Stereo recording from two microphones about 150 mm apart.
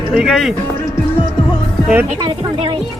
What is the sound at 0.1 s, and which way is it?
Speech, centre (ahead or behind).